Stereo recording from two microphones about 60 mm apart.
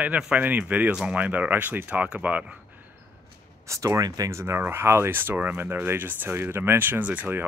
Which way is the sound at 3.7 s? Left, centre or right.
Right.